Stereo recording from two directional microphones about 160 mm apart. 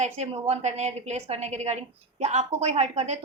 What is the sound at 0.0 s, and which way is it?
A woman's voice, 40° right (ahead or behind).